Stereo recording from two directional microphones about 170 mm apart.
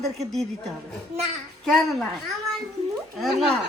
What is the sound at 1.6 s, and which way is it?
Speech, centre (ahead or behind).